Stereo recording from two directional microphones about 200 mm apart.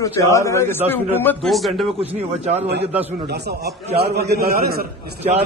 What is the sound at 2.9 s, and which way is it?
Speech, 10° right (ahead or behind).